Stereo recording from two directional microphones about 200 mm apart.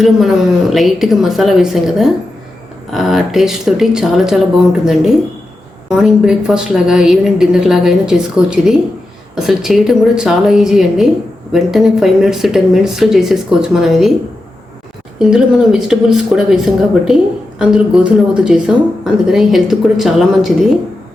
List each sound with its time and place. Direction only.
0.0 s a woman's voice: centre (ahead or behind)
15.2 s a woman's voice: 5° right (ahead or behind)